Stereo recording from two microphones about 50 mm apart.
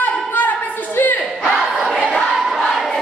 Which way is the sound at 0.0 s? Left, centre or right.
Left.